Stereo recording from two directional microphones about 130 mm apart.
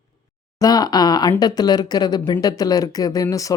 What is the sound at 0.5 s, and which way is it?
Speech, 30° left (ahead or behind).